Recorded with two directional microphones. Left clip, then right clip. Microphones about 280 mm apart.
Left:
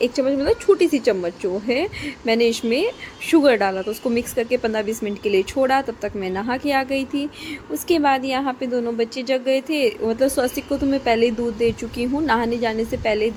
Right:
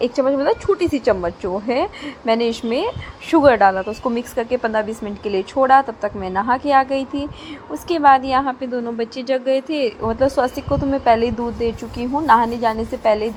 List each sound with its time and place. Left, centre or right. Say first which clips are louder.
0.0 s a woman's voice: right 3 dB; centre